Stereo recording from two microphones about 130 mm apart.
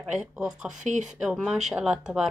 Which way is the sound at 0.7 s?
70° right (ahead or behind).